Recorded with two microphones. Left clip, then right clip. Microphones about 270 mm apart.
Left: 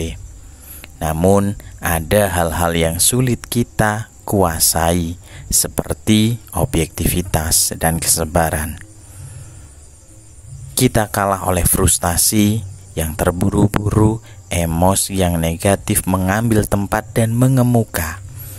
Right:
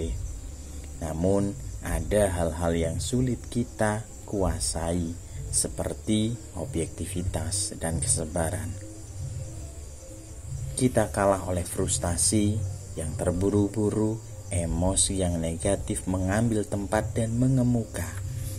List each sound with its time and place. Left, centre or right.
1.0 s speech: left
10.7 s speech: left